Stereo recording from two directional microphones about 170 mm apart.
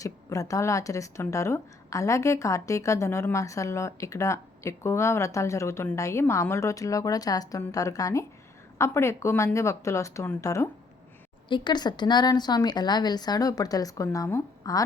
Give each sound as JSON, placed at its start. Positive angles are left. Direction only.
{"t": 0.0, "sound": "a woman's voice", "side_deg": 20}
{"t": 11.4, "sound": "a woman's voice", "side_deg": 25}